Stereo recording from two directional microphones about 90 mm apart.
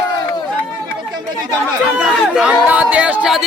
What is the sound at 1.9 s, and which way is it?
Speech, 5° right (ahead or behind).